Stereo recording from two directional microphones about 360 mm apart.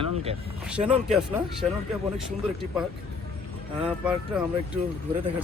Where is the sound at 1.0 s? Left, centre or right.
Centre.